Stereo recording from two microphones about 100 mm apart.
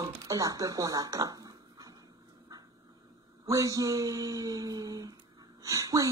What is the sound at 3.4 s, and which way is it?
Speech, 35° right (ahead or behind).